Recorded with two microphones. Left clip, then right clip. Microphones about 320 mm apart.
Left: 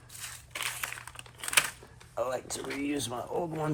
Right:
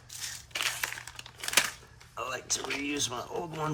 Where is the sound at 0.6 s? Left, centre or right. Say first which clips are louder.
Right 3 dB; centre.